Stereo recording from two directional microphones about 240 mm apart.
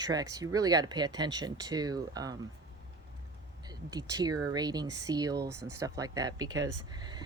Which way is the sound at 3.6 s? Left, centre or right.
Centre.